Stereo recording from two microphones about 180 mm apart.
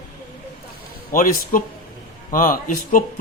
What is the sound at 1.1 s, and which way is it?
Speech, 50° left (ahead or behind).